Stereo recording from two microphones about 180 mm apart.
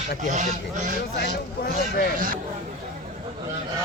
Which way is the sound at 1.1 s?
65° left (ahead or behind).